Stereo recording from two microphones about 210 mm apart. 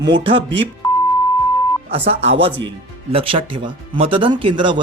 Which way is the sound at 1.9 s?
30° right (ahead or behind).